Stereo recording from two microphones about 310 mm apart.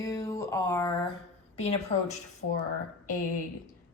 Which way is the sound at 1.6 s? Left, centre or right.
Left.